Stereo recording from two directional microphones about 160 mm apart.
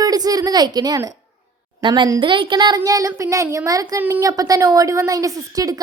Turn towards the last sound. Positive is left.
turn(degrees=-20)  # may be behind; listen again after turning